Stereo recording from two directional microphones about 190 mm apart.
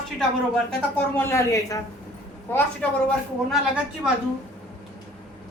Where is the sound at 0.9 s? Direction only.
10° left (ahead or behind).